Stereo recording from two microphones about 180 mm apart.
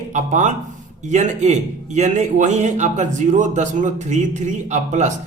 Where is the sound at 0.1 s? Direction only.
40° right (ahead or behind).